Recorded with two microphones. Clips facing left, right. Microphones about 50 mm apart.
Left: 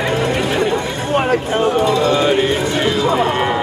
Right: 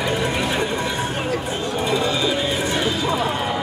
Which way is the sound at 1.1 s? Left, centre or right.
Left.